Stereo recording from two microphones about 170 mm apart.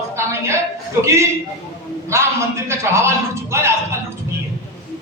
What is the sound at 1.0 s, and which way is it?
Speech, 15° right (ahead or behind).